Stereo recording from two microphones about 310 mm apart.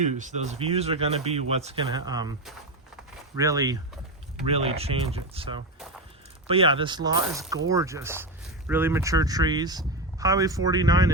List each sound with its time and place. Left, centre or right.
0.0 s speech: right
3.3 s speech: centre